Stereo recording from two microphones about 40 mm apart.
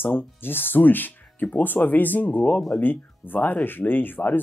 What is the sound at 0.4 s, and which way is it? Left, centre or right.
Speech, left.